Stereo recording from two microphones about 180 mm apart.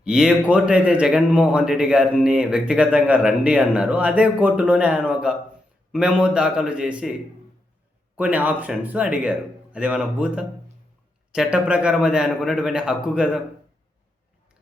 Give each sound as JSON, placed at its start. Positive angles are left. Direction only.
{"t": 0.0, "sound": "speech", "side_deg": -5}